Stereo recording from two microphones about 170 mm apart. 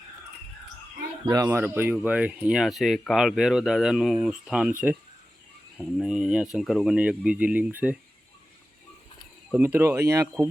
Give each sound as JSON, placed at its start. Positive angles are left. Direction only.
{"t": 1.2, "sound": "speech", "side_deg": -20}
{"t": 5.7, "sound": "speech", "side_deg": 0}
{"t": 9.5, "sound": "speech", "side_deg": -10}